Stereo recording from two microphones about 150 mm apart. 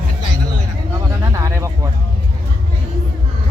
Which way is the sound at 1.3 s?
20° right (ahead or behind).